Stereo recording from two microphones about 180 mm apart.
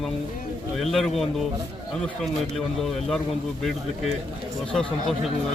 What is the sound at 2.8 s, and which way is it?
Speech, centre (ahead or behind).